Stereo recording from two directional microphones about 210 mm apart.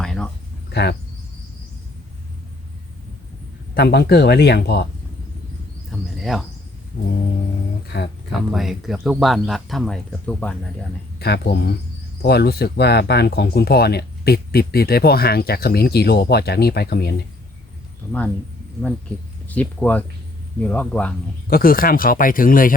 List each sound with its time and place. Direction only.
0.0 s cricket: 5° left (ahead or behind)
0.7 s speech: 55° left (ahead or behind)
3.8 s speech: 50° left (ahead or behind)
6.1 s a sound: centre (ahead or behind)
6.9 s speech: 45° left (ahead or behind)
8.3 s speech: centre (ahead or behind)
11.2 s speech: 50° left (ahead or behind)
19.5 s speech: 5° left (ahead or behind)
21.4 s speech: 45° left (ahead or behind)